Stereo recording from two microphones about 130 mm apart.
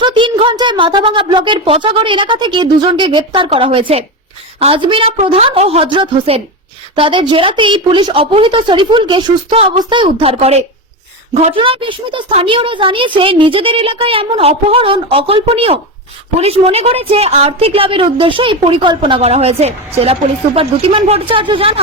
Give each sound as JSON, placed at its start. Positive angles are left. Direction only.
{"t": 0.0, "sound": "a woman's voice", "side_deg": -40}